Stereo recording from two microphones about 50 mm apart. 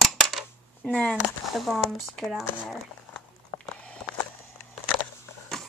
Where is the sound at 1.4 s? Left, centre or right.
Centre.